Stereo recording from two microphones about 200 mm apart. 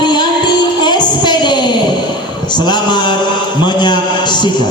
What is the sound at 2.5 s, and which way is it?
Mantra, 20° left (ahead or behind).